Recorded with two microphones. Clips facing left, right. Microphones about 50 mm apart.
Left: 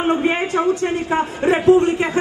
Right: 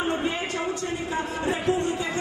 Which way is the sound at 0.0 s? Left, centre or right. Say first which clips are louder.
Left 8 dB; left.